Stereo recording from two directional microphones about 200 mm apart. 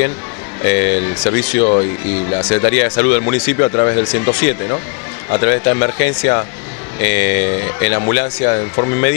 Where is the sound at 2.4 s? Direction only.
15° left (ahead or behind).